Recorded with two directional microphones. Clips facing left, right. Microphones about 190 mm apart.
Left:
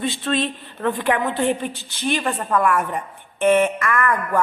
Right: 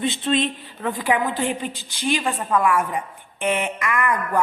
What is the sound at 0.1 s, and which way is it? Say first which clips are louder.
A woman's voice: right 1 dB; 20° right (ahead or behind).